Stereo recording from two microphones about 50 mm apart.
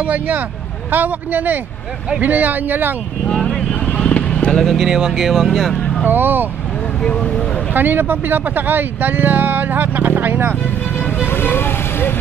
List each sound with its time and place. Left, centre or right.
0.0 s speech: right
3.8 s vehicle: left
4.5 s speech: centre
6.0 s speech: right
7.0 s speech: centre
7.7 s speech: right
11.1 s vehicle: left